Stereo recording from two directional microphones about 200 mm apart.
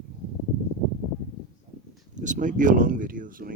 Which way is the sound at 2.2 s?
40° right (ahead or behind).